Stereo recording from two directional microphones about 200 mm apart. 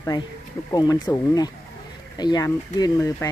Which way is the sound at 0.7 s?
20° left (ahead or behind).